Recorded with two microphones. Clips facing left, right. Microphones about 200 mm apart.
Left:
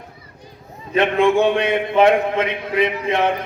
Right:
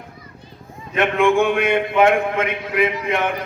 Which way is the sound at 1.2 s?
30° left (ahead or behind).